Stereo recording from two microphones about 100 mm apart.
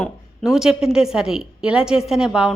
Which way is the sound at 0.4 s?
5° right (ahead or behind).